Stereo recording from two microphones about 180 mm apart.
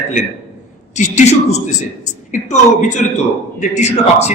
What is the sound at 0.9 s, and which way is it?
A man's voice, 40° left (ahead or behind).